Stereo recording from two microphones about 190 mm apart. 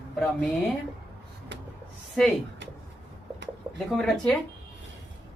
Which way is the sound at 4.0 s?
5° left (ahead or behind).